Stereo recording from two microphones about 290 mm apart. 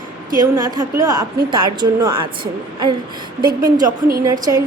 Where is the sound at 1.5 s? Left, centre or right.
Centre.